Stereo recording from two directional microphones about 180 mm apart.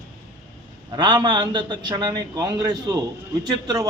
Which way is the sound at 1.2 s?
25° right (ahead or behind).